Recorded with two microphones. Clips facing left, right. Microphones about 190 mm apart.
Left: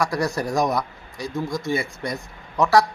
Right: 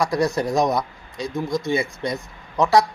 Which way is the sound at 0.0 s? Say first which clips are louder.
Right 3 dB; 20° right (ahead or behind).